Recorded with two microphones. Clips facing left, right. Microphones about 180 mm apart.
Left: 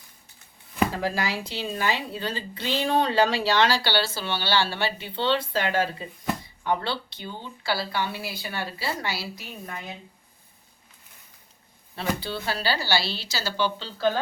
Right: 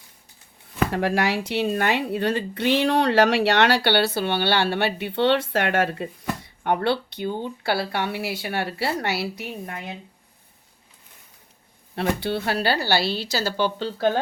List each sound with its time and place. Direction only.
0.9 s speech: 70° right (ahead or behind)
12.2 s speech: 60° right (ahead or behind)